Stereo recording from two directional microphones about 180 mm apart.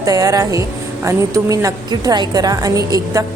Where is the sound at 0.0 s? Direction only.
20° right (ahead or behind).